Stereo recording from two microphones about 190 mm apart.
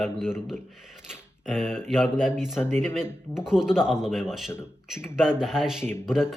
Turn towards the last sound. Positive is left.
turn(degrees=0)  # may be behind; listen again after turning